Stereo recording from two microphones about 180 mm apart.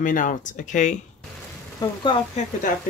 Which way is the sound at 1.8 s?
20° left (ahead or behind).